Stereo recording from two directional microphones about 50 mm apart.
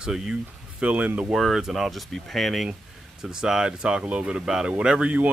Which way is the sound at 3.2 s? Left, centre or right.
Centre.